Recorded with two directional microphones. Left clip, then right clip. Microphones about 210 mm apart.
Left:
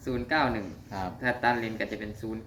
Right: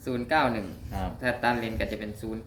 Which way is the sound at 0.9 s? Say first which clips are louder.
Left 2 dB; 30° left (ahead or behind).